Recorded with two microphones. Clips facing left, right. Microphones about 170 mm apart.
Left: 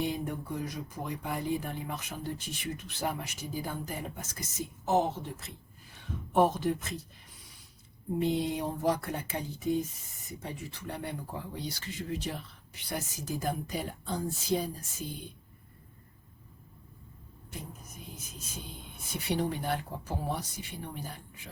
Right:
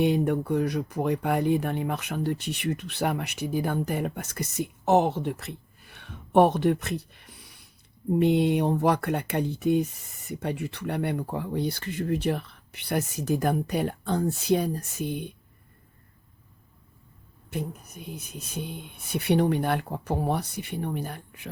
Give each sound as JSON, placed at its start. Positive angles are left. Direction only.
{"t": 0.0, "sound": "speech", "side_deg": -70}
{"t": 17.5, "sound": "speech", "side_deg": -65}